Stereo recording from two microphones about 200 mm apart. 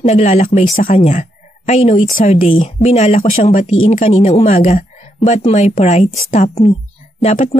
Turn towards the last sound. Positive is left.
turn(degrees=35)  # may be behind; listen again after turning